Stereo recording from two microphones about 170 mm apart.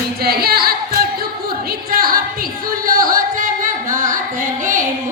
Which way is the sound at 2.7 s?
55° right (ahead or behind).